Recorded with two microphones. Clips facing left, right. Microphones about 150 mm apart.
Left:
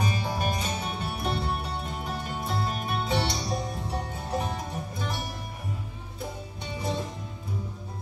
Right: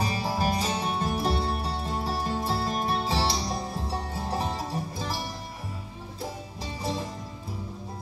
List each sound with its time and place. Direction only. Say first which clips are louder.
0.0 s music: right 2 dB; 30° right (ahead or behind)
6.6 s music: even; 35° right (ahead or behind)